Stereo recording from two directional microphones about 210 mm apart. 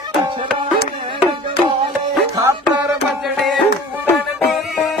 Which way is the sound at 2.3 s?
15° right (ahead or behind).